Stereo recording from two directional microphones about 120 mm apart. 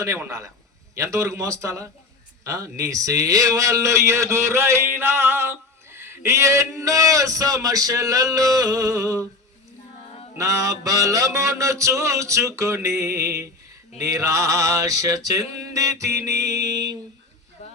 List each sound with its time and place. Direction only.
0.0 s a man's voice: 25° right (ahead or behind)
10.3 s a man's voice: 30° right (ahead or behind)
17.6 s a sound: 65° left (ahead or behind)